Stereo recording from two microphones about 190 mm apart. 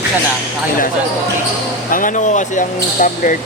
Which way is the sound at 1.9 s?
45° left (ahead or behind).